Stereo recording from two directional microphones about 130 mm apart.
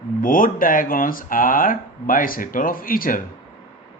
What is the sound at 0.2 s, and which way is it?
Speech, 90° left.